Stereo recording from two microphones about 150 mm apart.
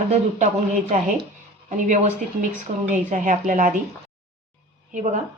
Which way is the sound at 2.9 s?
55° right (ahead or behind).